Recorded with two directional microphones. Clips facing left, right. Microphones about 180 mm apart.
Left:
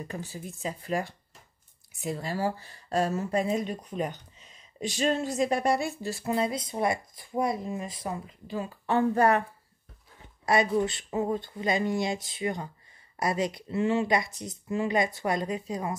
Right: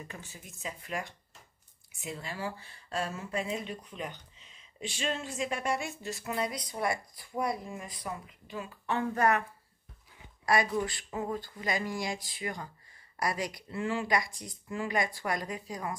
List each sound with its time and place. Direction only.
0.1 s speech: 35° left (ahead or behind)
10.4 s speech: 25° left (ahead or behind)